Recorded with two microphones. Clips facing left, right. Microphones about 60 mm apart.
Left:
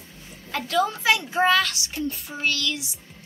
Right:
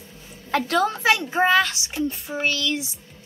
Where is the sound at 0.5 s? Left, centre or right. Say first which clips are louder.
Right 3 dB; right.